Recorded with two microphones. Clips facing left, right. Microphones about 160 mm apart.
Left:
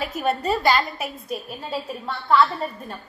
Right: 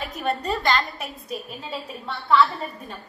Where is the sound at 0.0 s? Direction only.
5° left (ahead or behind).